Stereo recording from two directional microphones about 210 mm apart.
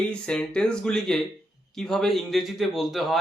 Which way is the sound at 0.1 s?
5° left (ahead or behind).